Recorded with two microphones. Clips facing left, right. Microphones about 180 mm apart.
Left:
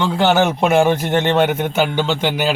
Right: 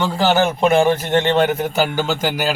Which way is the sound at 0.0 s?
Centre (ahead or behind).